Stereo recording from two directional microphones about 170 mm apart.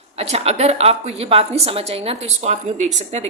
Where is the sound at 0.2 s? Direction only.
40° right (ahead or behind).